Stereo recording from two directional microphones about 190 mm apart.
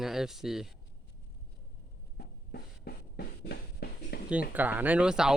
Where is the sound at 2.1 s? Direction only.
55° left (ahead or behind).